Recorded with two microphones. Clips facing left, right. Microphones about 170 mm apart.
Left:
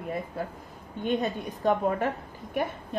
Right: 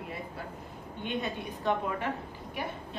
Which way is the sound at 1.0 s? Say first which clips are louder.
Left 6 dB; 40° left (ahead or behind).